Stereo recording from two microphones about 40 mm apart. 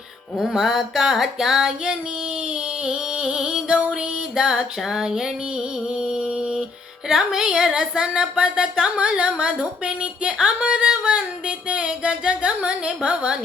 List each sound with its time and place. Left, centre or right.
0.4 s female singing: centre
3.9 s music: centre
6.4 s mantra: centre
7.1 s speech: centre
10.6 s music: right